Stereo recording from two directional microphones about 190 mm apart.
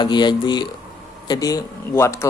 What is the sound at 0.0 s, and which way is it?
Speech, 25° left (ahead or behind).